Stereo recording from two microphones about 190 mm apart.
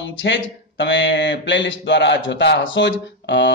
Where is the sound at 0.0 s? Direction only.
70° left (ahead or behind).